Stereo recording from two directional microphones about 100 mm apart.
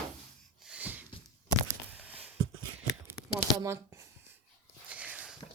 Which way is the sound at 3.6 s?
30° right (ahead or behind).